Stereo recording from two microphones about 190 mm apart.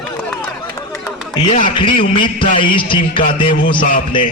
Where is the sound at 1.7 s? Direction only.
25° left (ahead or behind).